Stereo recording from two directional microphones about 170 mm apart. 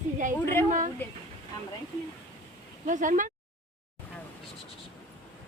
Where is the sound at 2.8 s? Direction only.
45° right (ahead or behind).